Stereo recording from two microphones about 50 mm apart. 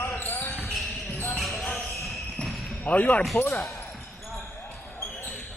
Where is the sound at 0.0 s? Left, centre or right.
Left.